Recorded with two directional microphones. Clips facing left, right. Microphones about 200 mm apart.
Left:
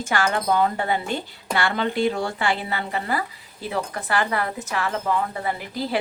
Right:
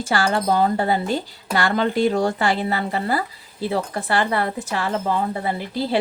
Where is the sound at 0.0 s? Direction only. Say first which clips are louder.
Right 3 dB; 35° right (ahead or behind).